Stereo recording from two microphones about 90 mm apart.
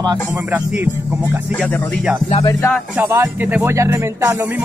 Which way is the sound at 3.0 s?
20° right (ahead or behind).